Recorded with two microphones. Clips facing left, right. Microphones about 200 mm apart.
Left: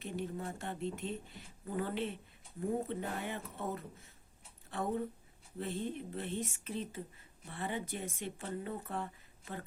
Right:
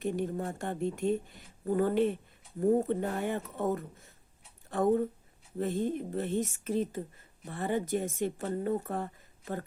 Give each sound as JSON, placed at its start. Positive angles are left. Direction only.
{"t": 0.0, "sound": "speech", "side_deg": -45}